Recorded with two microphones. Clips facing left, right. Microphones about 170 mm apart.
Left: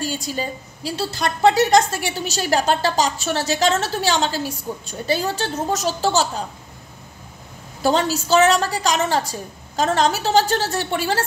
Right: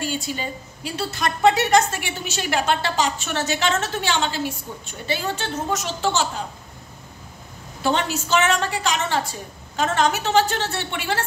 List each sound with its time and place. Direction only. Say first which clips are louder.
0.0 s a woman's voice: left 2 dB; 40° left (ahead or behind)
7.8 s a woman's voice: left 4 dB; 35° left (ahead or behind)